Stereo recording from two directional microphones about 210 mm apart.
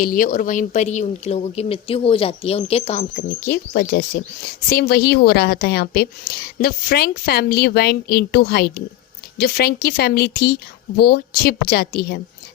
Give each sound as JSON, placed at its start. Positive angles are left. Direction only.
{"t": 0.0, "sound": "a woman's voice", "side_deg": 40}